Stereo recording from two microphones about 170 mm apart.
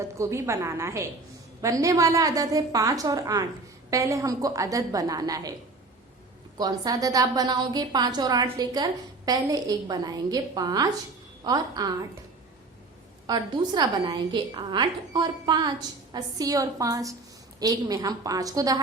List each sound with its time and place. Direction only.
0.0 s a woman's voice: 15° right (ahead or behind)
6.6 s a woman's voice: 20° right (ahead or behind)
13.2 s a woman's voice: 25° right (ahead or behind)